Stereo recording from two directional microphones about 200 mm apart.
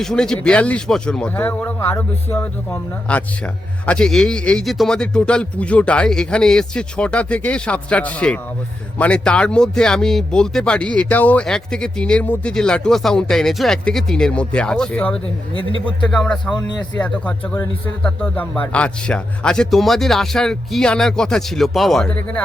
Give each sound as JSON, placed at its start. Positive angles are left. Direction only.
{"t": 0.0, "sound": "speech", "side_deg": 5}
{"t": 15.5, "sound": "a man's voice", "side_deg": 25}
{"t": 16.0, "sound": "speech", "side_deg": 5}